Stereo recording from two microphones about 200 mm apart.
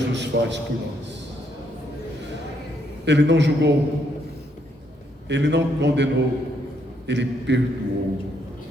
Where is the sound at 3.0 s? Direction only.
60° right (ahead or behind).